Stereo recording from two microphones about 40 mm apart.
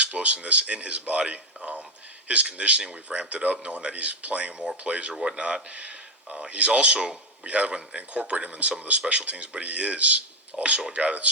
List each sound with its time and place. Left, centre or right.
0.0 s speech: right
4.5 s speech: centre
4.8 s speech: right
5.1 s speech: centre
5.4 s speech: right
6.2 s speech: centre
6.5 s speech: right
10.5 s speech: centre
10.9 s speech: right